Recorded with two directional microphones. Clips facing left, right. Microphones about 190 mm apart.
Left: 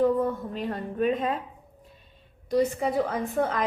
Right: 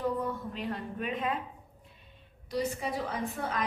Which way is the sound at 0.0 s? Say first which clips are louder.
Left 9 dB; 45° left (ahead or behind).